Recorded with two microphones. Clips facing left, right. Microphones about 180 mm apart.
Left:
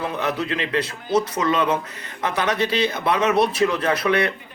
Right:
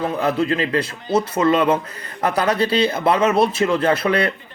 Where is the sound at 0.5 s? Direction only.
35° right (ahead or behind).